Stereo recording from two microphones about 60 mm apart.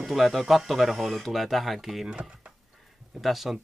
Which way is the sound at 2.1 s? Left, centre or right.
Centre.